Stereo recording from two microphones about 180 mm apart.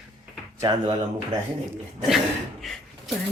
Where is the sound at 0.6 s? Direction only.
25° right (ahead or behind).